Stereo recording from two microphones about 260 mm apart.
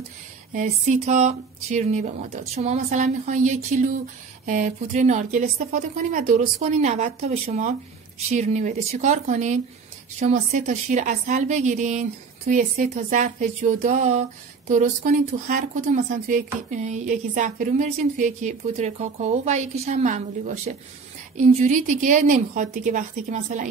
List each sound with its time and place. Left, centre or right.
0.5 s a woman's voice: right